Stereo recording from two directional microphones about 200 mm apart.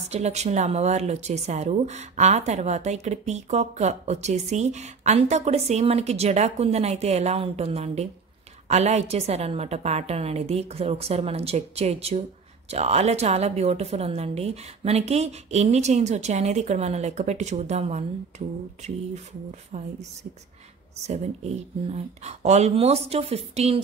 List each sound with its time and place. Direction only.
0.1 s speech: 35° right (ahead or behind)
21.8 s speech: 35° right (ahead or behind)